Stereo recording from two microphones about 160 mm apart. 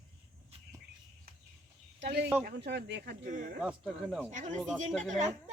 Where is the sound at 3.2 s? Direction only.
55° right (ahead or behind).